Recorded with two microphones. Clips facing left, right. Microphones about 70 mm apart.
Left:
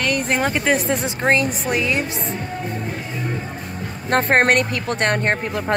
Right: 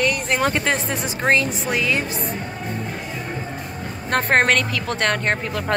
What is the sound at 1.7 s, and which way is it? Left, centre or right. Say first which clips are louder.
Speech: even; left.